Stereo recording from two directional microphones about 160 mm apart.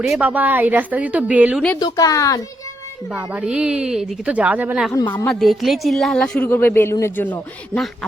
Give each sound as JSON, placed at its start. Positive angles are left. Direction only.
{"t": 0.0, "sound": "a woman's voice", "side_deg": -5}
{"t": 1.8, "sound": "speech", "side_deg": 20}
{"t": 3.1, "sound": "a woman's voice", "side_deg": -5}
{"t": 4.9, "sound": "speech", "side_deg": 25}
{"t": 5.1, "sound": "speech", "side_deg": 5}